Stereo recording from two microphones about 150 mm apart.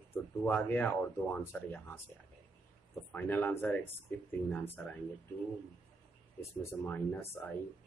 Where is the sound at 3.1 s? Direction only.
10° left (ahead or behind).